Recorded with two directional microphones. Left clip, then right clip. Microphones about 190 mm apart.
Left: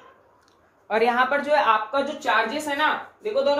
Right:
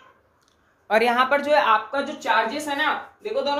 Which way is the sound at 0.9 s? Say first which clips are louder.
Right 2 dB; 55° right (ahead or behind).